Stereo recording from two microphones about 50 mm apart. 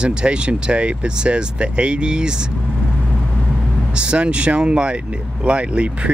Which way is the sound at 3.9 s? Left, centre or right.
Right.